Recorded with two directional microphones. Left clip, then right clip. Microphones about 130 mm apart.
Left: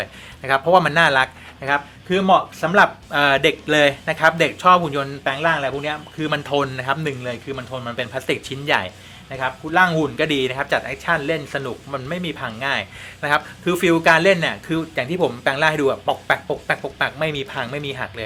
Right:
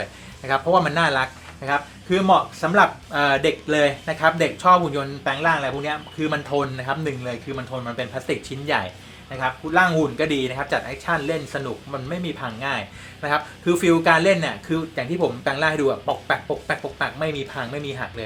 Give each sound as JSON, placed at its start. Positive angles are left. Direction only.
{"t": 0.0, "sound": "speech", "side_deg": 25}